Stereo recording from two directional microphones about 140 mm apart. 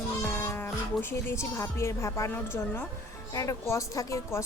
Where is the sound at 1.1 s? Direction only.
20° left (ahead or behind).